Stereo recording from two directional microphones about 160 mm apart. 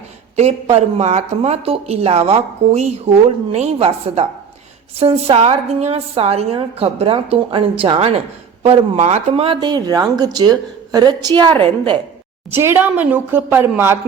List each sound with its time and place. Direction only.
0.3 s speech: 40° right (ahead or behind)
12.5 s speech: 15° right (ahead or behind)